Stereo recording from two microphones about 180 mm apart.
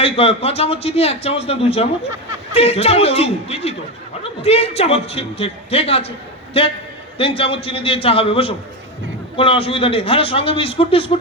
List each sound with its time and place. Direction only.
0.0 s a man's voice: 35° left (ahead or behind)